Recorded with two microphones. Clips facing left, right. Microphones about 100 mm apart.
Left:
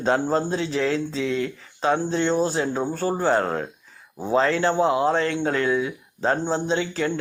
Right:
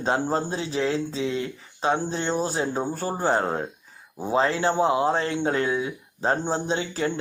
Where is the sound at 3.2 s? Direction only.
25° right (ahead or behind).